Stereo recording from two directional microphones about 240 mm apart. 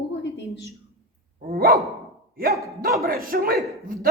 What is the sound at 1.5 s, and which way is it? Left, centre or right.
Speech, right.